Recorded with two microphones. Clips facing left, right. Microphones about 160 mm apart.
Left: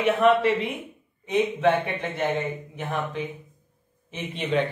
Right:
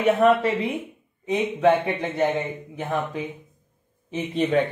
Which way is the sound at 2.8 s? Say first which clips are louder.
Right 3 dB; 25° right (ahead or behind).